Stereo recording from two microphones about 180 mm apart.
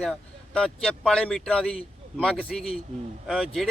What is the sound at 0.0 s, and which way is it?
A man's voice, 5° left (ahead or behind).